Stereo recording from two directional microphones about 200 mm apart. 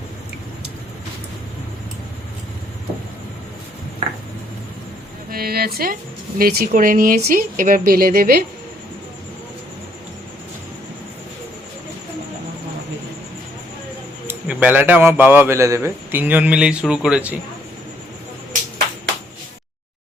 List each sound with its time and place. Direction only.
5.3 s speech: 50° right (ahead or behind)
14.3 s a man's voice: 5° right (ahead or behind)